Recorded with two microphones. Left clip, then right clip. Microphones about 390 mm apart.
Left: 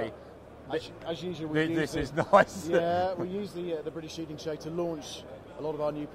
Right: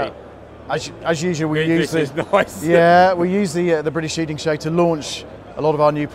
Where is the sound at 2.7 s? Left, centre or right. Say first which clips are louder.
Right 15 dB; right.